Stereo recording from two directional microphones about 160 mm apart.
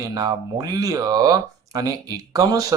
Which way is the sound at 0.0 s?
25° right (ahead or behind).